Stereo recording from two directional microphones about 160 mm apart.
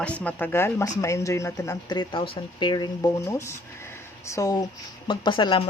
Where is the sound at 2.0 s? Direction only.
35° left (ahead or behind).